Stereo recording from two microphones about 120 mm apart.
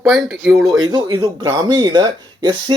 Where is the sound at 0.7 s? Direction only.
35° right (ahead or behind).